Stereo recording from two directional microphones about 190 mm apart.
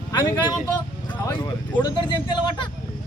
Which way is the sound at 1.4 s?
25° left (ahead or behind).